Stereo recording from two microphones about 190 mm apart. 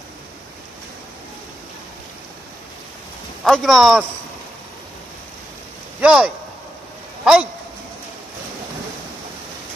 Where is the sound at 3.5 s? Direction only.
Centre (ahead or behind).